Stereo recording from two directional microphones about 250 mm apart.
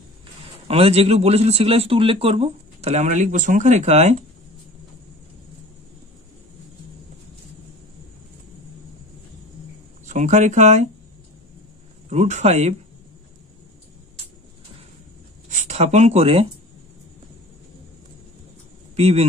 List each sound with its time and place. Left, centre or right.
0.7 s speech: right
10.0 s speech: right
12.1 s speech: right
15.5 s speech: right
18.9 s speech: right